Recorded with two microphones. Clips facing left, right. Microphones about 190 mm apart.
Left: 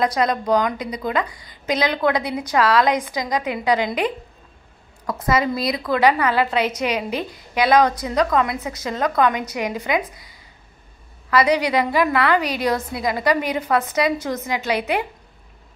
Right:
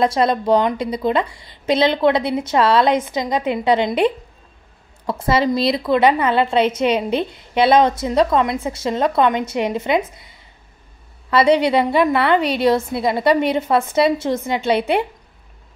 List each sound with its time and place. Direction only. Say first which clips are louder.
0.0 s a woman's voice: right 3 dB; 30° right (ahead or behind)